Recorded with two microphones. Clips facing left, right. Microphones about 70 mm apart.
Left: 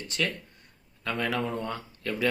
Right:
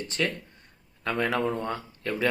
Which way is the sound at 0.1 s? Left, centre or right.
Right.